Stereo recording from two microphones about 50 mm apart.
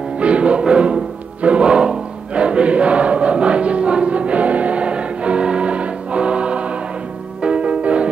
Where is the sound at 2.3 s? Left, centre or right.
Right.